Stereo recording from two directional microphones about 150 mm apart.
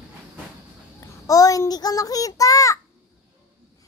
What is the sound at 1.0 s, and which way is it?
A child's voice, 25° left (ahead or behind).